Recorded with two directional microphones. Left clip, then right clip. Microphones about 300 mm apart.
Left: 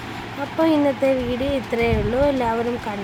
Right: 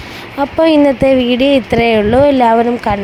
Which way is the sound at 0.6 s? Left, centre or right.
Right.